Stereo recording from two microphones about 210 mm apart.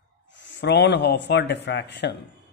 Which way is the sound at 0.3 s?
55° left (ahead or behind).